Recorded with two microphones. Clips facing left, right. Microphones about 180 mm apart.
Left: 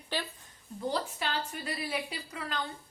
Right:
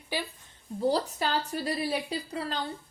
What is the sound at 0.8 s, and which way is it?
A woman's voice, 35° right (ahead or behind).